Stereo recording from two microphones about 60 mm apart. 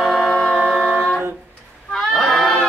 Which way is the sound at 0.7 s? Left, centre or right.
Centre.